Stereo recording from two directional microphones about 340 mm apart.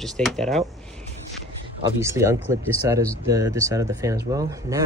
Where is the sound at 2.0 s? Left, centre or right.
Centre.